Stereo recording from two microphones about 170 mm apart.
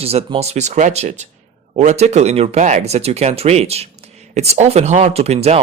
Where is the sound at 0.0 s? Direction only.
35° right (ahead or behind).